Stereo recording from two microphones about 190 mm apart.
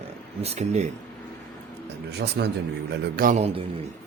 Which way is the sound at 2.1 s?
60° right (ahead or behind).